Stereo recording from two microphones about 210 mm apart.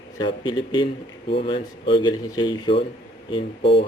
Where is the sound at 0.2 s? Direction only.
20° left (ahead or behind).